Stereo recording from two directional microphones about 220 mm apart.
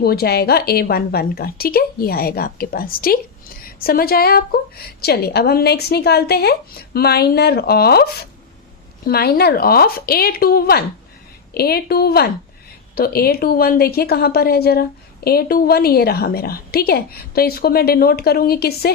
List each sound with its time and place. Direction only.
0.0 s a woman's voice: 45° left (ahead or behind)